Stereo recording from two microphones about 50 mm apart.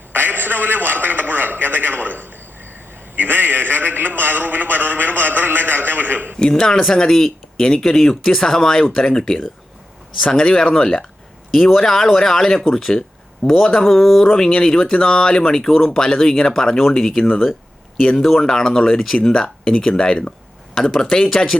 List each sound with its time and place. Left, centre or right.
0.1 s a man's voice: right
6.4 s speech: centre
11.5 s speech: centre